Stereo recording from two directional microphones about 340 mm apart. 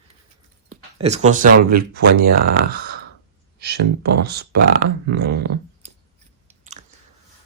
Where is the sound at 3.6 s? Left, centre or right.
Right.